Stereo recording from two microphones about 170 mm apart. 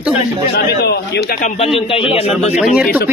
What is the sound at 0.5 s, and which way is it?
Speech, 70° left (ahead or behind).